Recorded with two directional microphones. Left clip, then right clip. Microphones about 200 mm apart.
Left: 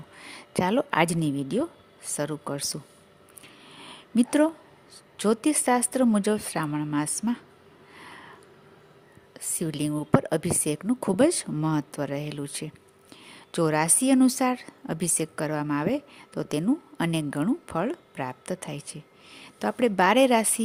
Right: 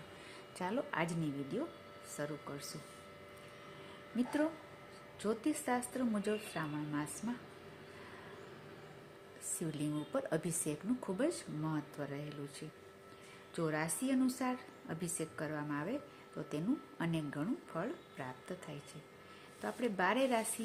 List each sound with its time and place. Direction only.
0.3 s a woman's voice: 50° left (ahead or behind)
4.2 s a woman's voice: 55° left (ahead or behind)
9.6 s a woman's voice: 50° left (ahead or behind)